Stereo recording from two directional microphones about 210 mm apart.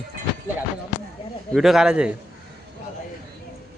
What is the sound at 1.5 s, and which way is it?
Speech, centre (ahead or behind).